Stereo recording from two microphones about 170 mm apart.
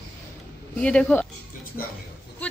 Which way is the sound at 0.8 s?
5° left (ahead or behind).